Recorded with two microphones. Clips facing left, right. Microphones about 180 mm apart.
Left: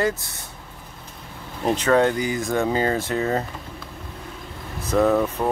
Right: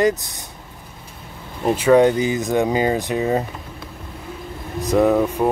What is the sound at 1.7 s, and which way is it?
Mantra, 10° right (ahead or behind).